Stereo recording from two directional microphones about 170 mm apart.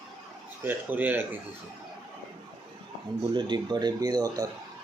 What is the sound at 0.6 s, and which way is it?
Speech, 10° right (ahead or behind).